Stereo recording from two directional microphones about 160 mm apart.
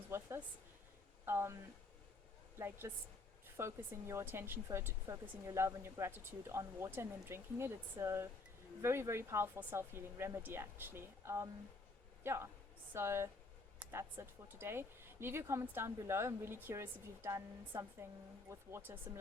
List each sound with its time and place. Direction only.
0.1 s speech: 15° right (ahead or behind)
2.6 s a woman's voice: 15° right (ahead or behind)